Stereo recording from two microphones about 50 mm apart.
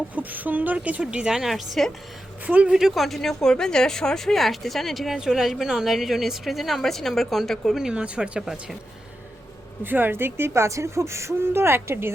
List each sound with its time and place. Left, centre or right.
0.1 s speech: right
1.3 s speech: centre
2.5 s speech: right
2.7 s speech: centre
3.2 s speech: centre
7.9 s speech: right
9.8 s speech: right
11.4 s speech: right